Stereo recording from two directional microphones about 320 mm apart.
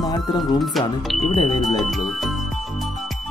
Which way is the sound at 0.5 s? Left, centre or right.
Centre.